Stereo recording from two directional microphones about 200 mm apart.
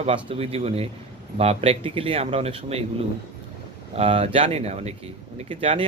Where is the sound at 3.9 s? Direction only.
30° right (ahead or behind).